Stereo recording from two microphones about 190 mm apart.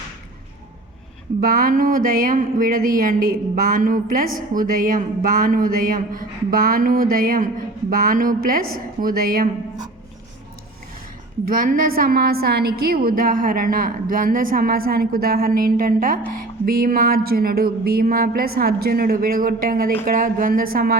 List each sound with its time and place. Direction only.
1.4 s a woman's voice: 50° right (ahead or behind)
11.4 s a woman's voice: 50° right (ahead or behind)